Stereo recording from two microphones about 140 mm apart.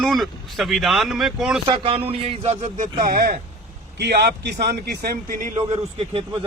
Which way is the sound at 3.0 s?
90° right.